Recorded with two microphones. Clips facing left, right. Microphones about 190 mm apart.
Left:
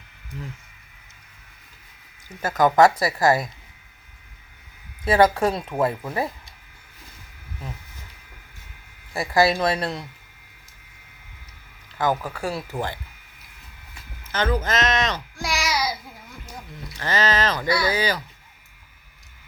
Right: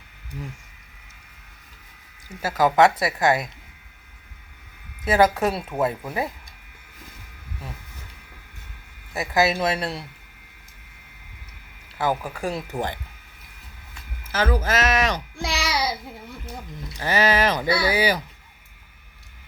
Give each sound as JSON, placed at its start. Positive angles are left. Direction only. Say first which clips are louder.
{"t": 2.4, "sound": "speech", "louder": "left 1 dB", "side_deg": -5}
{"t": 5.0, "sound": "speech", "louder": "left 1 dB", "side_deg": 0}
{"t": 9.3, "sound": "speech", "louder": "left 2 dB", "side_deg": -5}
{"t": 11.9, "sound": "speech", "louder": "left 1 dB", "side_deg": -10}
{"t": 14.3, "sound": "speech", "louder": "even", "side_deg": -5}
{"t": 15.4, "sound": "a sound", "louder": "left 3 dB", "side_deg": -30}
{"t": 17.0, "sound": "speech", "louder": "right 2 dB", "side_deg": -10}